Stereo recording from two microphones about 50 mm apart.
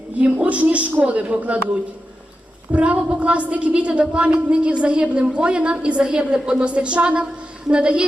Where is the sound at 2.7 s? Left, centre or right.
Right.